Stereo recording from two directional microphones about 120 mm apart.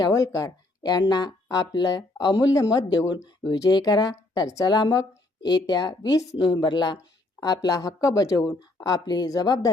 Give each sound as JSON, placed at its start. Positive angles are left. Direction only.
{"t": 0.0, "sound": "a woman's voice", "side_deg": 25}